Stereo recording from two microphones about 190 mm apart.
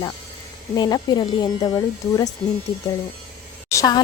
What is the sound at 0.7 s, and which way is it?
Speech, 20° left (ahead or behind).